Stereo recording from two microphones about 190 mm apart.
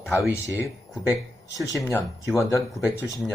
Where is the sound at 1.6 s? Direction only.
20° left (ahead or behind).